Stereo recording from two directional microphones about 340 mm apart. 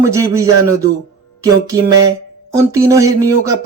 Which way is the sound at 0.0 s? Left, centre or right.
Centre.